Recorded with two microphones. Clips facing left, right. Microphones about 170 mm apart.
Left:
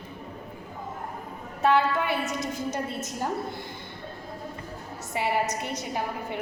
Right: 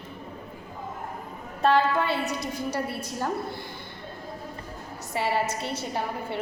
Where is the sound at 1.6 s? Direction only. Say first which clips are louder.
Right 1 dB; 15° left (ahead or behind).